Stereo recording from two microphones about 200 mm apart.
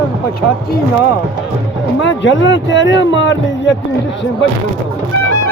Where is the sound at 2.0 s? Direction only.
65° left (ahead or behind).